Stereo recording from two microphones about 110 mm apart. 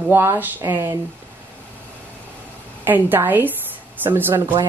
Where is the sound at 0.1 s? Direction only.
20° right (ahead or behind).